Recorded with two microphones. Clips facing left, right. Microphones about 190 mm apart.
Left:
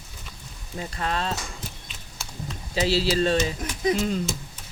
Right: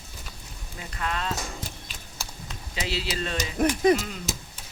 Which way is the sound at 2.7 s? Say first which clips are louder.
Left 8 dB; 35° left (ahead or behind).